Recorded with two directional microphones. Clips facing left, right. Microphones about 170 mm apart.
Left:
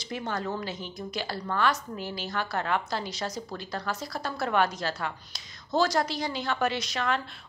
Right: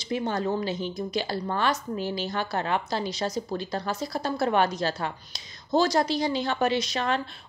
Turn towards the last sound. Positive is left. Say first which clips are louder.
# right 3 dB
turn(degrees=-25)  # may be behind; listen again after turning